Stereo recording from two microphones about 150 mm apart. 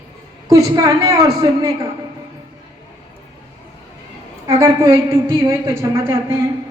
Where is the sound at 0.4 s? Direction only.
25° right (ahead or behind).